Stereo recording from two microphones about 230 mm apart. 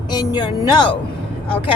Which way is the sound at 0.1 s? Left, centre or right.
Centre.